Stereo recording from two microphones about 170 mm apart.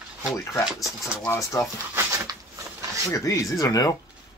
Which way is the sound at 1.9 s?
20° right (ahead or behind).